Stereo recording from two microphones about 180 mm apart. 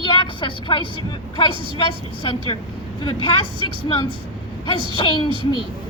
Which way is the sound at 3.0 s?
30° left (ahead or behind).